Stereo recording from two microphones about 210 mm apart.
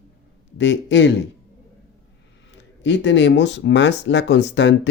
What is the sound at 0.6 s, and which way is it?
Speech, 60° left (ahead or behind).